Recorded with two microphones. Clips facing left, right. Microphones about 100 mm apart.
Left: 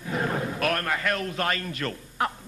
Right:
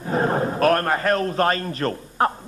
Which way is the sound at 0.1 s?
40° right (ahead or behind).